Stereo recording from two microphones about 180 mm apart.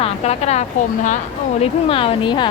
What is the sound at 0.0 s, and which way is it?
A woman's voice, 35° left (ahead or behind).